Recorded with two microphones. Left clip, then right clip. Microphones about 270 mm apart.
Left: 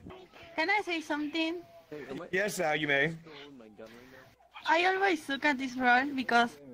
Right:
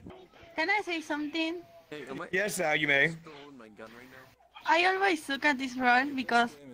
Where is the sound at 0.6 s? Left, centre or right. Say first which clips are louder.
Even; centre.